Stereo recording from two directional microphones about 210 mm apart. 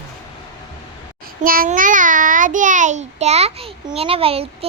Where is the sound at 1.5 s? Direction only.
40° right (ahead or behind).